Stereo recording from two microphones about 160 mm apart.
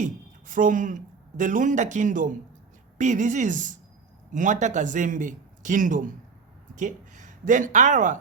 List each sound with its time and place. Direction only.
0.0 s a woman's voice: 55° right (ahead or behind)